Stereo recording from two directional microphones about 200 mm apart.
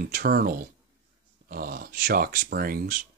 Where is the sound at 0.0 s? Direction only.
50° right (ahead or behind).